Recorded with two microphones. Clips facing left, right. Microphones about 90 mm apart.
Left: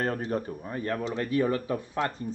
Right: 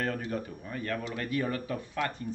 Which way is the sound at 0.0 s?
35° left (ahead or behind).